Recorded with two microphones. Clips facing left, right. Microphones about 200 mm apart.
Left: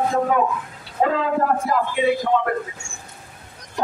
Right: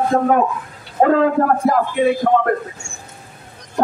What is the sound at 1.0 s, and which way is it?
Speech, 55° right (ahead or behind).